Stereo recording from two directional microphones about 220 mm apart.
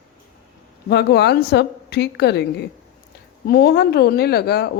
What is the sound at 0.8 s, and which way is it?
Speech, 50° left (ahead or behind).